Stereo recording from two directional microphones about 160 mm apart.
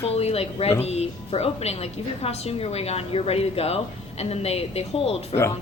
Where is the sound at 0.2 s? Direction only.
40° left (ahead or behind).